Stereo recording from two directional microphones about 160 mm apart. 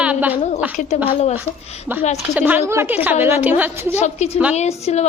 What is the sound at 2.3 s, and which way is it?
A woman's voice, 10° right (ahead or behind).